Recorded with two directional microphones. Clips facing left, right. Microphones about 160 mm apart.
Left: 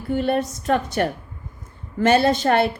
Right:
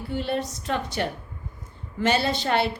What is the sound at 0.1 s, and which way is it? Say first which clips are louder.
A woman's voice: left 7 dB; 50° left (ahead or behind).